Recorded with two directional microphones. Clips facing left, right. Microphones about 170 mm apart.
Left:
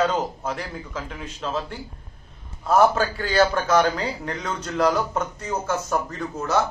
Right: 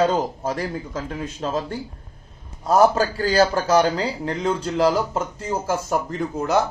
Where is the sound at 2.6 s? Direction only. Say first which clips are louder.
Right 2 dB; 35° right (ahead or behind).